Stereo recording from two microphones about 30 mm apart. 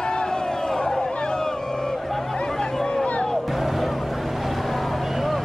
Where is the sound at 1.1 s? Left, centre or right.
Left.